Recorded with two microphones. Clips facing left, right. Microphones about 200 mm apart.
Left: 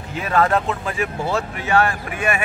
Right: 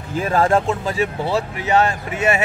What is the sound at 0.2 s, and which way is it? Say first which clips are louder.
Speech: right 2 dB; 30° right (ahead or behind).